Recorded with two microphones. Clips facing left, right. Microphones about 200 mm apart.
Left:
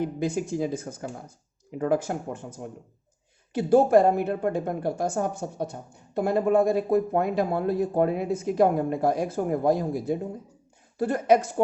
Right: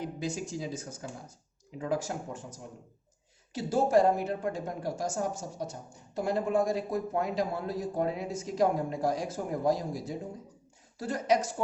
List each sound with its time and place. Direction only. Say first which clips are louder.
0.0 s a woman's voice: left 8 dB; 55° left (ahead or behind)